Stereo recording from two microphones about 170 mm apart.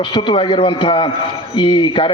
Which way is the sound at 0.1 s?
30° left (ahead or behind).